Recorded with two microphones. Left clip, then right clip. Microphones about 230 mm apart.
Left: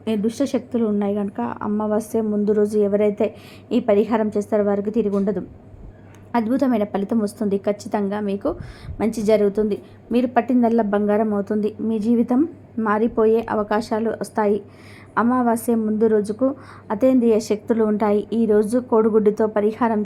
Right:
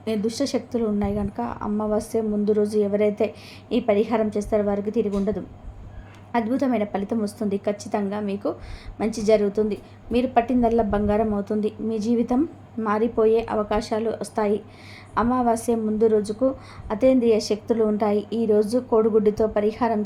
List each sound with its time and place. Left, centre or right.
0.0 s a woman's voice: centre